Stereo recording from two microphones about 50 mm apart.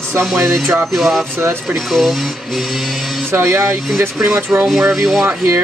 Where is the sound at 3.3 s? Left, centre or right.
Right.